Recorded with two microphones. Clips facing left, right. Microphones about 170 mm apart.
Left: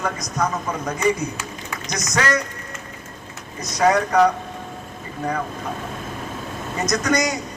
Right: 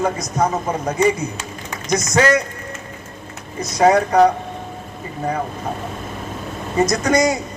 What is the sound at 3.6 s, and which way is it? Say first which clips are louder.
Speech: right 4 dB; 30° right (ahead or behind).